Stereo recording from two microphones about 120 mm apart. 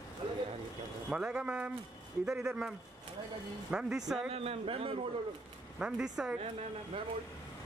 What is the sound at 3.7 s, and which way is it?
Speech, 5° right (ahead or behind).